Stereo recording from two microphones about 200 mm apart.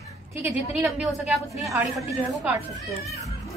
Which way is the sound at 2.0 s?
15° right (ahead or behind).